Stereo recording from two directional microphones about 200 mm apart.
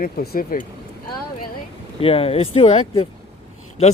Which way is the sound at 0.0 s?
45° left (ahead or behind).